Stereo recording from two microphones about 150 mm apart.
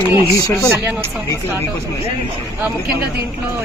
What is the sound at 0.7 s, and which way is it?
Speech, 15° right (ahead or behind).